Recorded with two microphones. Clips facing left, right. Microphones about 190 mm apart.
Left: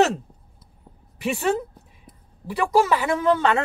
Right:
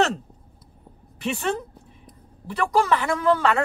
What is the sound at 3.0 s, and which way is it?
Speech, 20° left (ahead or behind).